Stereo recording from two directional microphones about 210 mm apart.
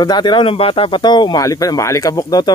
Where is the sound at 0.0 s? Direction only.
20° left (ahead or behind).